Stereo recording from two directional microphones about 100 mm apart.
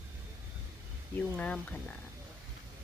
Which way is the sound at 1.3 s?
10° left (ahead or behind).